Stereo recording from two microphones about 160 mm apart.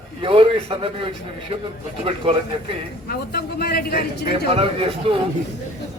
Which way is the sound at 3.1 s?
75° left (ahead or behind).